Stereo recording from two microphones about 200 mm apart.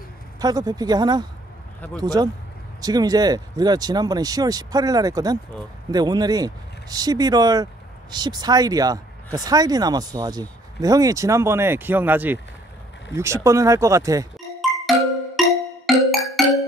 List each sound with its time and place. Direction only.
0.4 s speech: 20° right (ahead or behind)
14.6 s music: centre (ahead or behind)